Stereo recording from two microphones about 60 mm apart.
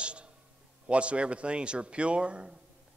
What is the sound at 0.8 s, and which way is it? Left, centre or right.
A man's voice, centre.